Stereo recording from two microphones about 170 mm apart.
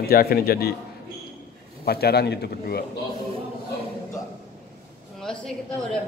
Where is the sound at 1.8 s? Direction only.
65° left (ahead or behind).